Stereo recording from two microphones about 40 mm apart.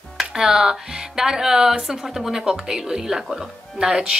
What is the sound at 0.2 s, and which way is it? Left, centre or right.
Speech, centre.